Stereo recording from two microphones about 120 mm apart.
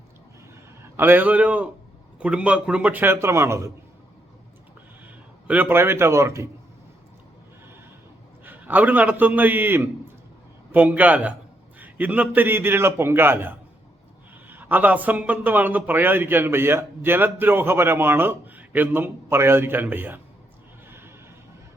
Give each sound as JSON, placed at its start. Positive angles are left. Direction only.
{"t": 0.8, "sound": "a man's voice", "side_deg": -20}
{"t": 5.0, "sound": "speech", "side_deg": -15}
{"t": 8.4, "sound": "a man's voice", "side_deg": -15}
{"t": 20.8, "sound": "neigh", "side_deg": -20}